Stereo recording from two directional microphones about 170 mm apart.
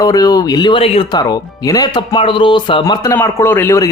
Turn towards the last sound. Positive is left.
turn(degrees=15)  # may be behind; listen again after turning